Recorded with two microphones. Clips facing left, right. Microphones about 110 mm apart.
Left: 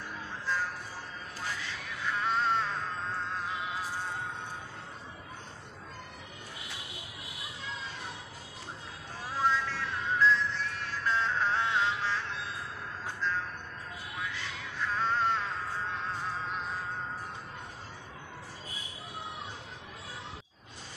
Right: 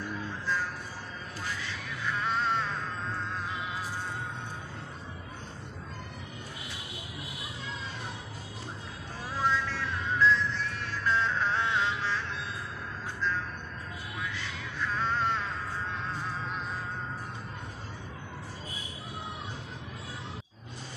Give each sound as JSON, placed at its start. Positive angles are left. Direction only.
{"t": 1.7, "sound": "music", "side_deg": 35}
{"t": 9.4, "sound": "music", "side_deg": 40}